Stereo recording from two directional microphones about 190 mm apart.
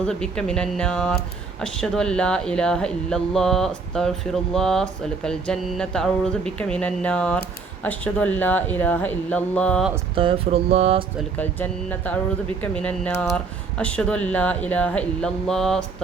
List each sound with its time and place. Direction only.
0.0 s speech: 5° left (ahead or behind)
10.2 s mantra: 30° right (ahead or behind)
11.3 s speech: 10° left (ahead or behind)